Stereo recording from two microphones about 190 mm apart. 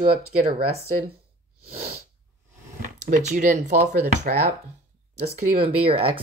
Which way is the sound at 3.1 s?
40° right (ahead or behind).